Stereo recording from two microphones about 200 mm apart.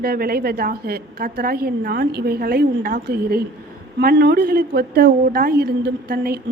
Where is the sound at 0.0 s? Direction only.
50° right (ahead or behind).